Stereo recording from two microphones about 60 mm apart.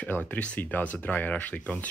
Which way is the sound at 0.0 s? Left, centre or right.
Left.